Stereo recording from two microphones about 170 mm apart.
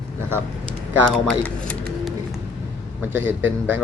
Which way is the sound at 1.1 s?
5° left (ahead or behind).